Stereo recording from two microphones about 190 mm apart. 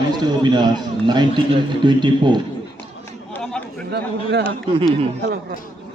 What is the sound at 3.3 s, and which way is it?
Chatter, 5° left (ahead or behind).